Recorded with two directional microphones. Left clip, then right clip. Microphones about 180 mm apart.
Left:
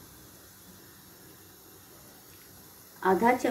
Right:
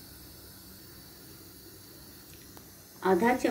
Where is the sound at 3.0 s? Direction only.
5° right (ahead or behind).